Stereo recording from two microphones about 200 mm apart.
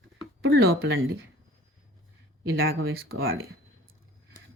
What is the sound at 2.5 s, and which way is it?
Speech, 85° right.